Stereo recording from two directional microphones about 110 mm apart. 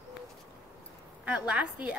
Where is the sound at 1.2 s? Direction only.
10° right (ahead or behind).